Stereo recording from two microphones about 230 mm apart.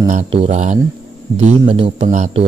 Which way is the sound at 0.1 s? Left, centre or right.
Right.